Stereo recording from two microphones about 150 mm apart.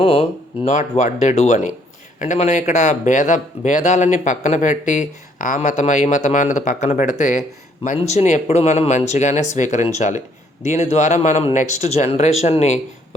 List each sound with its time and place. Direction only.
0.0 s speech: 45° left (ahead or behind)